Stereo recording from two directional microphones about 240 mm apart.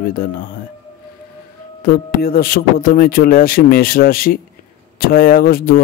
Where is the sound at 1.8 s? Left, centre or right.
Left.